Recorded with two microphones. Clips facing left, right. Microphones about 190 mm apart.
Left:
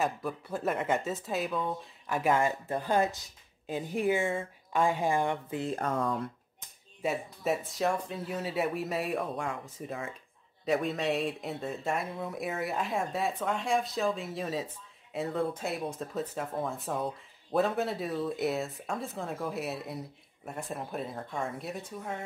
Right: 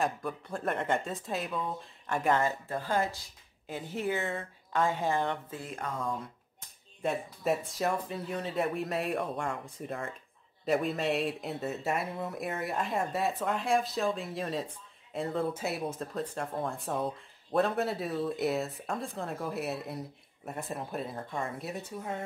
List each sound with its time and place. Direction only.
0.0 s speech: 5° left (ahead or behind)
5.7 s speech: 40° left (ahead or behind)
7.0 s speech: centre (ahead or behind)